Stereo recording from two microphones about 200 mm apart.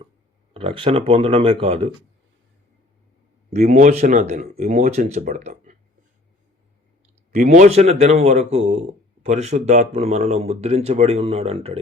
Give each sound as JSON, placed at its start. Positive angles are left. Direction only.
{"t": 0.5, "sound": "speech", "side_deg": -25}
{"t": 3.5, "sound": "speech", "side_deg": -35}
{"t": 7.3, "sound": "speech", "side_deg": -35}